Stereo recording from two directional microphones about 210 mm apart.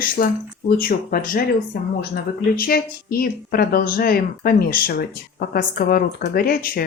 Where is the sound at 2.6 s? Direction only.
45° left (ahead or behind).